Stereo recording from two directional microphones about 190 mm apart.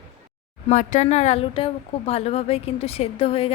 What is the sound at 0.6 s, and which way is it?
Speech, 40° left (ahead or behind).